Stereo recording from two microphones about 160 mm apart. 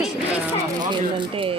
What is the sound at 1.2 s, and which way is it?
Speech, 35° right (ahead or behind).